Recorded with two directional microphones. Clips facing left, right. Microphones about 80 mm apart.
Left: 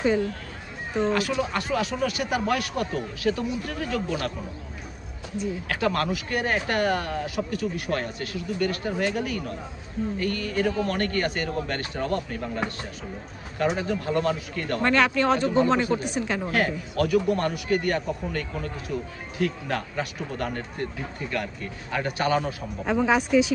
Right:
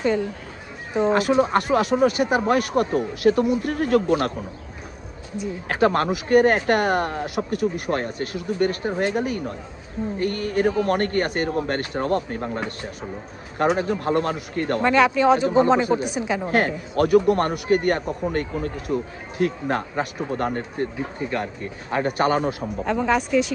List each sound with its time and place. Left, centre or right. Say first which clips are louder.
1.1 s speech: right 7 dB; right
5.7 s speech: right 7 dB; right
6.2 s speech: right 10 dB; right
14.8 s speech: right 4 dB; centre
16.4 s speech: right 4 dB; right
21.9 s speech: right 4 dB; right
22.8 s speech: even; centre